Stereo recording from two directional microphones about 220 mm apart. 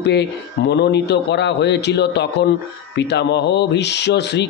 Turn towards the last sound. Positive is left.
turn(degrees=50)  # may be behind; listen again after turning